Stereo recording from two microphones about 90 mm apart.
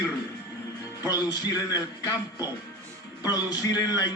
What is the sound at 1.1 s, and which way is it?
Speech, 45° left (ahead or behind).